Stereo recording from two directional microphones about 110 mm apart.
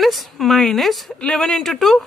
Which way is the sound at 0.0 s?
Centre (ahead or behind).